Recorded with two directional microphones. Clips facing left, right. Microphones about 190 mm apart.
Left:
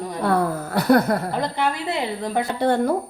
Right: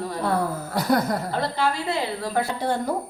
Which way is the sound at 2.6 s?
60° left (ahead or behind).